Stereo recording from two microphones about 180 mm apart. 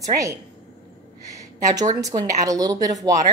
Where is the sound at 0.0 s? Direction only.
15° right (ahead or behind).